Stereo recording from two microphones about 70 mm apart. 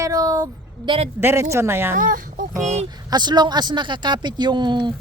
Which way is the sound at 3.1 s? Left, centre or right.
Right.